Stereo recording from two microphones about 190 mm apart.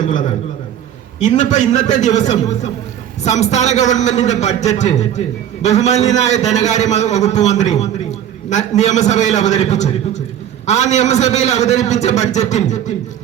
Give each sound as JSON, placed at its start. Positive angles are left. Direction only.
{"t": 1.2, "sound": "a man's voice", "side_deg": 40}